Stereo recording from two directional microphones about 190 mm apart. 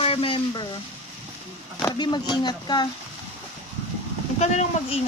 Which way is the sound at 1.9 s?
25° left (ahead or behind).